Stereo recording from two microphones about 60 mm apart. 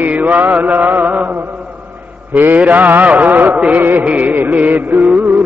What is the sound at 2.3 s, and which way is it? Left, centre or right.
Music, right.